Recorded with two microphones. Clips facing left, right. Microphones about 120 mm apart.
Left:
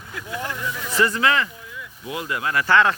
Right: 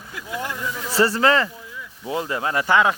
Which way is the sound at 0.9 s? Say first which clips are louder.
Right 3 dB; 35° right (ahead or behind).